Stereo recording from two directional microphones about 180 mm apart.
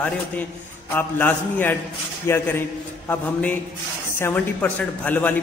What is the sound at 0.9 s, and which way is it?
A man's voice, 10° left (ahead or behind).